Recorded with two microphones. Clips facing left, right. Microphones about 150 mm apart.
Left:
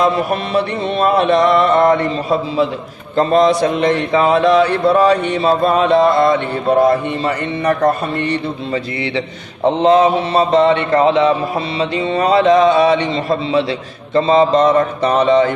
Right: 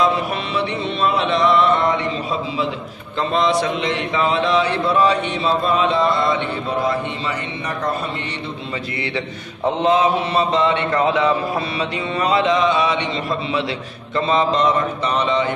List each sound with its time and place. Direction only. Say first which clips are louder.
0.0 s a man's voice: left 4 dB; 50° left (ahead or behind)
3.2 s a man's voice: left 6 dB; 45° left (ahead or behind)
9.8 s a man's voice: left 5 dB; 40° left (ahead or behind)